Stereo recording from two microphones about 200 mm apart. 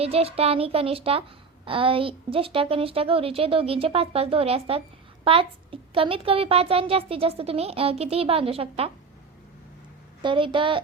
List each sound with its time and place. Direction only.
0.0 s a woman's voice: 30° right (ahead or behind)
10.2 s a woman's voice: 25° right (ahead or behind)